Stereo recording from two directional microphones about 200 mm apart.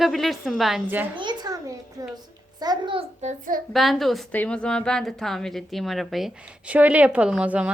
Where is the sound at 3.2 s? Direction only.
40° right (ahead or behind).